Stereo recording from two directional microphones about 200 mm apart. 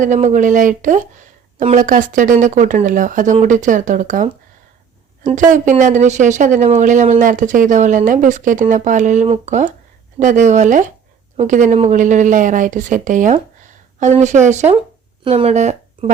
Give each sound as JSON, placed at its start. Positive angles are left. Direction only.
{"t": 0.0, "sound": "speech", "side_deg": -35}